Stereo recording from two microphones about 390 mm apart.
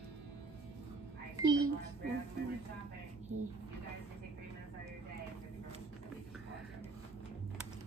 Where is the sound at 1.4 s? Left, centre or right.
Centre.